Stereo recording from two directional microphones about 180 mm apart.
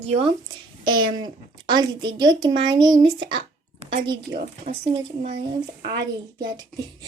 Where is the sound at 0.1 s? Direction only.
30° right (ahead or behind).